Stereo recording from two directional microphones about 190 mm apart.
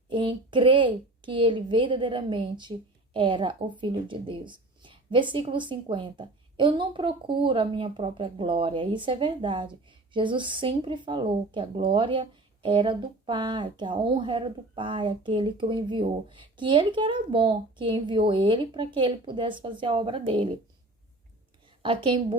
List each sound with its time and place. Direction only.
0.1 s a woman's voice: 25° right (ahead or behind)
21.8 s a woman's voice: 25° right (ahead or behind)